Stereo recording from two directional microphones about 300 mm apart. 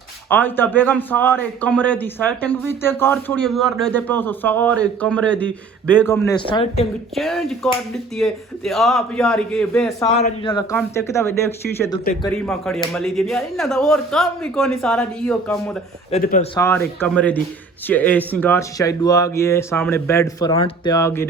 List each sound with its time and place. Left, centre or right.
0.3 s a man's voice: centre
7.2 s a man's voice: centre
10.2 s a man's voice: centre
16.1 s speech: left
16.6 s a man's voice: centre